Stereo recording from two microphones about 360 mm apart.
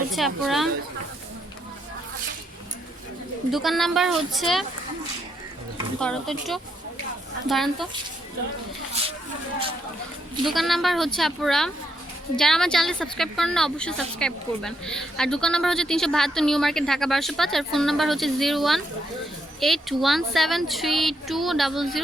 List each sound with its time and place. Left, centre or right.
0.2 s a woman's voice: centre
3.5 s a woman's voice: centre
6.0 s a woman's voice: centre
9.0 s a sound: centre
10.4 s a woman's voice: centre